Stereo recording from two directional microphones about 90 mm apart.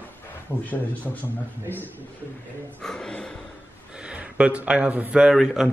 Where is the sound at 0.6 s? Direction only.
20° left (ahead or behind).